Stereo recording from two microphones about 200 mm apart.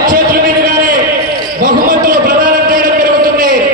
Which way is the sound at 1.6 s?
45° right (ahead or behind).